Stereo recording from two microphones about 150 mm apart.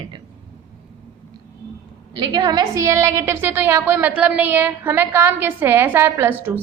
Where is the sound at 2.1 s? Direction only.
25° right (ahead or behind).